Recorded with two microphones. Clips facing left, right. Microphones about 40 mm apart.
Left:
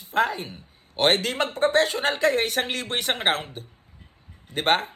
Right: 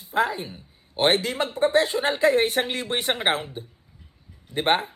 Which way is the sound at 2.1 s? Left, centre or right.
Centre.